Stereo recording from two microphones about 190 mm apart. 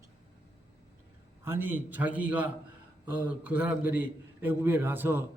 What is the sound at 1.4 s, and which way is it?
A man's voice, 10° right (ahead or behind).